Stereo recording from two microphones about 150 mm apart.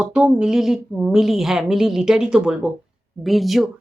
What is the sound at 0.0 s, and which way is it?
A woman's voice, 5° right (ahead or behind).